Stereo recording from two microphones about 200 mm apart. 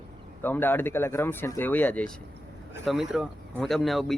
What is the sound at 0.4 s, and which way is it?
Speech, 10° left (ahead or behind).